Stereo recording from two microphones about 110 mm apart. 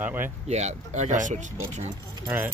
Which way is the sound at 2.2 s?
20° right (ahead or behind).